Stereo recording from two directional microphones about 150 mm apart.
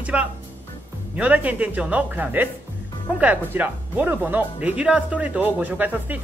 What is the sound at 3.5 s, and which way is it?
Speech, 10° right (ahead or behind).